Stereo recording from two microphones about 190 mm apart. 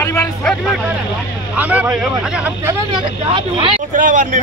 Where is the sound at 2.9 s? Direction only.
25° right (ahead or behind).